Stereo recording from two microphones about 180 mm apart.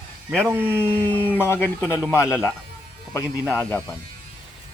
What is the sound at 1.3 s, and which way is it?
Speech, 10° left (ahead or behind).